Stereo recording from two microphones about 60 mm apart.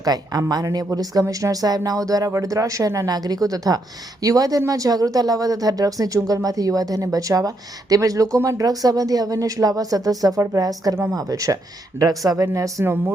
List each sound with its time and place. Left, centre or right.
0.0 s speech: right